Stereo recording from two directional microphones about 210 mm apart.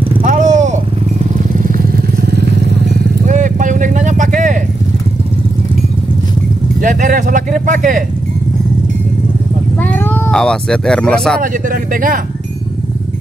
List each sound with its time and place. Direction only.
0.1 s vehicle: 35° right (ahead or behind); by 3.1 s 50° right (ahead or behind)
3.3 s vehicle: 35° right (ahead or behind)
6.8 s speech: 40° right (ahead or behind)
9.9 s speech: 10° left (ahead or behind)
11.7 s speech: 40° right (ahead or behind)